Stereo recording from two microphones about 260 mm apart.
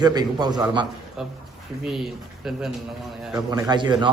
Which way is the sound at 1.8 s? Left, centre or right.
Centre.